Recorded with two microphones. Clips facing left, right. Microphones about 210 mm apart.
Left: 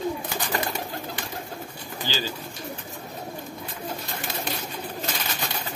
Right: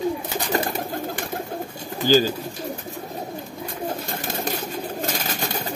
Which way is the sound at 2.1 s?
45° right (ahead or behind).